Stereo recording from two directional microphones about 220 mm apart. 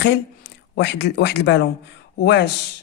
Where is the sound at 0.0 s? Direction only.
50° left (ahead or behind).